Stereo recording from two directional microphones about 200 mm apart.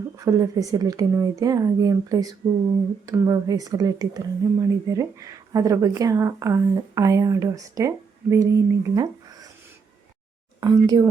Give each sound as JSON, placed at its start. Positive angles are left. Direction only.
{"t": 0.2, "sound": "speech", "side_deg": -15}
{"t": 10.6, "sound": "speech", "side_deg": -20}